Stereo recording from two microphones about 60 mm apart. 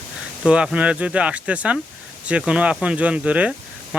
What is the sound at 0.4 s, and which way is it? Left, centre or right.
Speech, centre.